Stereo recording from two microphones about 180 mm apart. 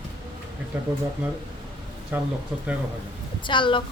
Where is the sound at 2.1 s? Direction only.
10° right (ahead or behind).